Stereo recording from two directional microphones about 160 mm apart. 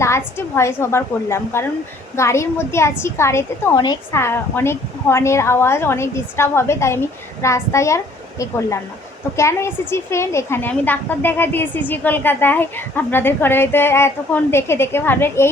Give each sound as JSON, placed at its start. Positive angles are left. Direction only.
{"t": 0.0, "sound": "a woman's voice", "side_deg": 15}